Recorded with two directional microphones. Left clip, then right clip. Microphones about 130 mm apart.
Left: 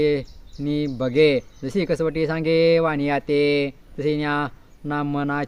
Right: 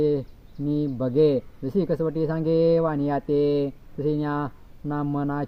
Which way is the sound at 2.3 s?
55° left (ahead or behind).